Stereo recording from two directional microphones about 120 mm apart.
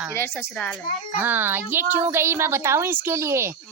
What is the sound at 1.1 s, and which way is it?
A woman's voice, 15° right (ahead or behind).